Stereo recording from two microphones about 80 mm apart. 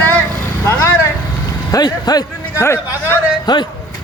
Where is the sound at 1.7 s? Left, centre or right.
Left.